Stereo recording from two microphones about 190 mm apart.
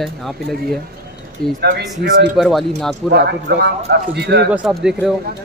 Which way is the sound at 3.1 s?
60° right (ahead or behind).